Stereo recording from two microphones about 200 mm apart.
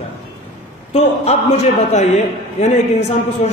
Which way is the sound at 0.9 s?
30° left (ahead or behind).